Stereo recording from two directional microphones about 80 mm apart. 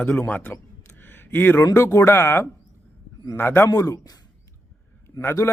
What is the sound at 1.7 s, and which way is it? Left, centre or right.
A man's voice, left.